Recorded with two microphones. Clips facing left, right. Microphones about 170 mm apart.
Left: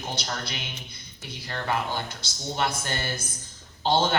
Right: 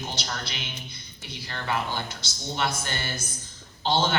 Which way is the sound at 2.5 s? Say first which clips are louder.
Left 1 dB; 45° left (ahead or behind).